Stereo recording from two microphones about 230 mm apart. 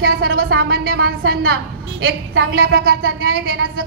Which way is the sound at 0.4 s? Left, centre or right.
Right.